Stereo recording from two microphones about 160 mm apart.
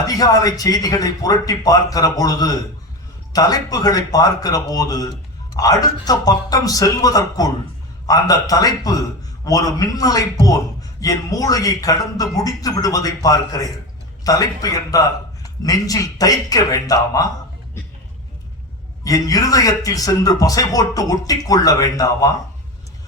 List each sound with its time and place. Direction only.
0.0 s a man's voice: 25° left (ahead or behind)
19.0 s a man's voice: 20° left (ahead or behind)